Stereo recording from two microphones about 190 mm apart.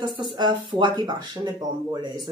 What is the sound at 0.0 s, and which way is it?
Speech, 25° right (ahead or behind).